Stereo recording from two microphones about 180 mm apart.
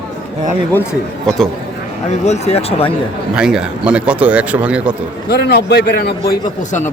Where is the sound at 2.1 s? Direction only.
40° left (ahead or behind).